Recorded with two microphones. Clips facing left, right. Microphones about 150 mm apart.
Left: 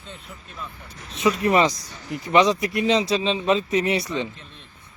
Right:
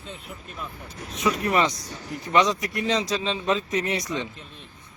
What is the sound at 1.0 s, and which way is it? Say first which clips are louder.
Speech: left 4 dB; 30° left (ahead or behind).